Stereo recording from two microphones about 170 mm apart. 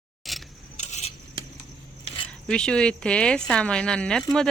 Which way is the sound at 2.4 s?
5° left (ahead or behind).